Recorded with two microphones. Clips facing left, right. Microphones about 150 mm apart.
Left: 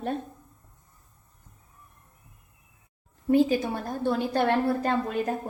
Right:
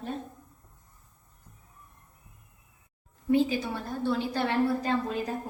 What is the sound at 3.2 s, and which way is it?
A woman's voice, 45° left (ahead or behind).